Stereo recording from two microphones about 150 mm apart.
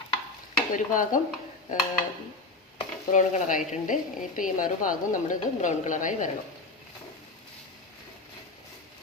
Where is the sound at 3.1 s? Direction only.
55° left (ahead or behind).